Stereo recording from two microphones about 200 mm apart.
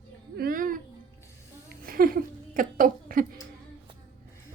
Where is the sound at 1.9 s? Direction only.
45° right (ahead or behind).